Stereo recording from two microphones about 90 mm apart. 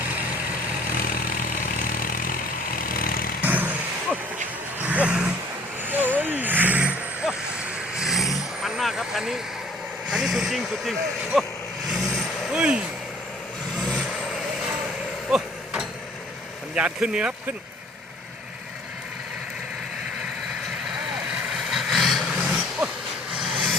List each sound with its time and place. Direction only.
3.4 s a sound: 20° right (ahead or behind)
4.8 s vehicle: 15° right (ahead or behind)
7.9 s vehicle: 5° right (ahead or behind)
10.1 s speech: centre (ahead or behind)
11.9 s vehicle: centre (ahead or behind)
12.5 s a sound: 10° right (ahead or behind)
15.3 s a sound: 5° right (ahead or behind)
16.7 s speech: 10° right (ahead or behind)
21.5 s vehicle: centre (ahead or behind)